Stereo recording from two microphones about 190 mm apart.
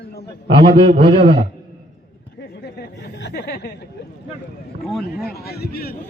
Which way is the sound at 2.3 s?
55° left (ahead or behind).